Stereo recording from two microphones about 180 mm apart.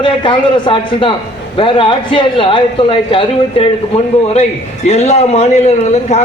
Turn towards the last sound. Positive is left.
turn(degrees=40)  # may be behind; listen again after turning